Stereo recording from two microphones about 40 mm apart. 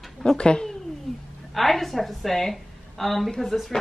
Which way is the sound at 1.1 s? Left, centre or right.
Centre.